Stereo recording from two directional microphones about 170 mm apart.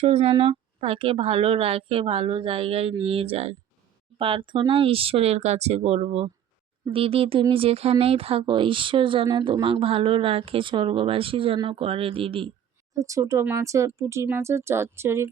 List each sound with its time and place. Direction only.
0.0 s speech: 35° right (ahead or behind)
12.9 s speech: 20° right (ahead or behind)